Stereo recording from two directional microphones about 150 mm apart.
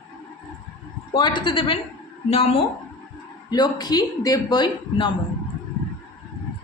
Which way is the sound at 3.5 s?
25° left (ahead or behind).